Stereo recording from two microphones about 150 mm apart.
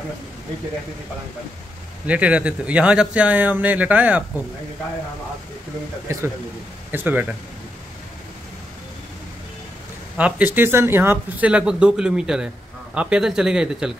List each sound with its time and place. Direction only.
2.0 s speech: 10° right (ahead or behind)
6.1 s speech: 20° right (ahead or behind)
10.1 s speech: 10° right (ahead or behind)